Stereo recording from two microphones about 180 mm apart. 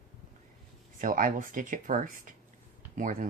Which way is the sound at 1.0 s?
50° right (ahead or behind).